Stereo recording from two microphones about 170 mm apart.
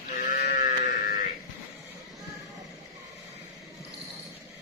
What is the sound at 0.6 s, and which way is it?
Livestock, 50° left (ahead or behind).